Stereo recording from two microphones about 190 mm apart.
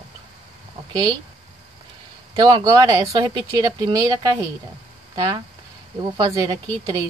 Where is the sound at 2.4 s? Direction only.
25° right (ahead or behind).